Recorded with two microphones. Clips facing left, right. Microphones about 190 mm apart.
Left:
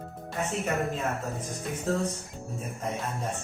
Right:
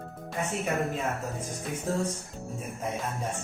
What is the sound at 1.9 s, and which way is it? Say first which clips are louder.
Speech: left 1 dB; 10° right (ahead or behind).